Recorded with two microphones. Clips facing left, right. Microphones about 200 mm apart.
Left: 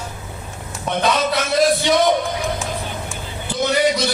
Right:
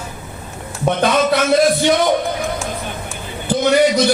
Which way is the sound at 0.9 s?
55° right (ahead or behind).